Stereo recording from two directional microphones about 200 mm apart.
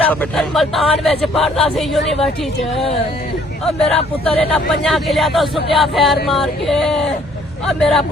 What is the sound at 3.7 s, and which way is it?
Speech, 30° left (ahead or behind).